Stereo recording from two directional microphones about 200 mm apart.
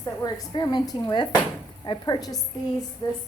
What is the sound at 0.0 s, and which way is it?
A woman's voice, 15° left (ahead or behind).